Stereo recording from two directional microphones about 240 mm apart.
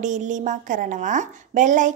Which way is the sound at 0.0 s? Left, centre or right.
Right.